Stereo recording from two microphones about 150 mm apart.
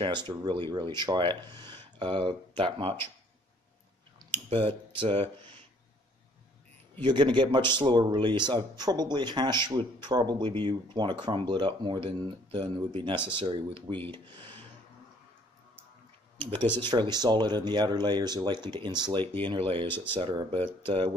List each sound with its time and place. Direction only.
0.0 s speech: 30° right (ahead or behind)
4.3 s speech: 35° right (ahead or behind)
7.0 s speech: 30° right (ahead or behind)
16.8 s speech: 30° right (ahead or behind)